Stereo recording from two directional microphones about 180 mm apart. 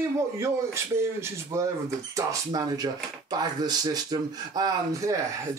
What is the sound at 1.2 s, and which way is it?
Speech, 15° right (ahead or behind).